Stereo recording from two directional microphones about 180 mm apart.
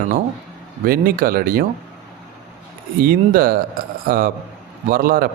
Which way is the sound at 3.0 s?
55° right (ahead or behind).